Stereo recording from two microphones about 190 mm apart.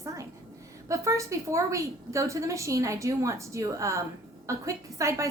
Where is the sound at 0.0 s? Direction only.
15° right (ahead or behind).